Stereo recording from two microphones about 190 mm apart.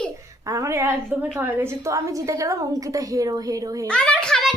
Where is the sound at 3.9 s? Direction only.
5° left (ahead or behind).